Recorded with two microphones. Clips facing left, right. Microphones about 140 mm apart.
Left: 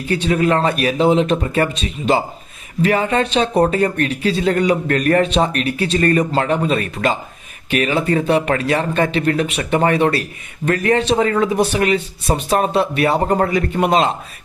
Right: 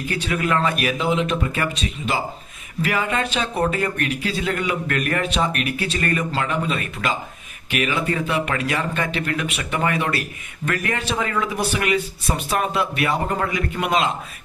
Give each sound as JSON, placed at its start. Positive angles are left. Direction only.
{"t": 0.1, "sound": "a man's voice", "side_deg": 30}